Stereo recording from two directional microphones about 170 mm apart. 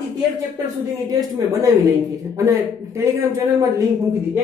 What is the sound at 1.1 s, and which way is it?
Speech, 20° right (ahead or behind).